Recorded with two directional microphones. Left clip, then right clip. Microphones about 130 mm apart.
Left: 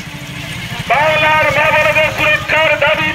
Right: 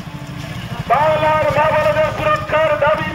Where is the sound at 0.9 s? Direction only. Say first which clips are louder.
Left 2 dB; 30° right (ahead or behind).